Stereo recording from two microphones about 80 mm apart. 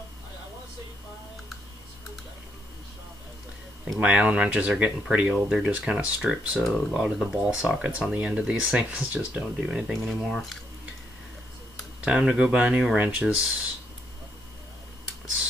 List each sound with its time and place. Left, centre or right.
4.0 s speech: centre
6.6 s speech: centre
7.0 s speech: centre
10.0 s speech: centre
12.0 s speech: centre